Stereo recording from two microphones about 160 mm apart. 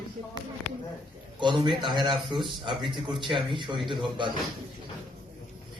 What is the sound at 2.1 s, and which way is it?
Speech, centre (ahead or behind).